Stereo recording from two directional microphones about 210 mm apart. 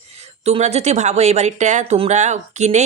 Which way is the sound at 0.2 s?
30° right (ahead or behind).